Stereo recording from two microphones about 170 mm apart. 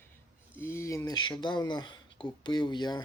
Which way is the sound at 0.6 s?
15° left (ahead or behind).